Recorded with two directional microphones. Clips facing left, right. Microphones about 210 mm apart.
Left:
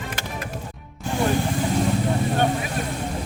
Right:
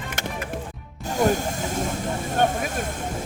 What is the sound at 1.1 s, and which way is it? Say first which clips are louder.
Vehicle: even; 45° right (ahead or behind).